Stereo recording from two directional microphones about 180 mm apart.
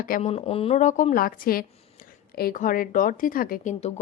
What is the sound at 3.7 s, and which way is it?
Speech, 35° left (ahead or behind).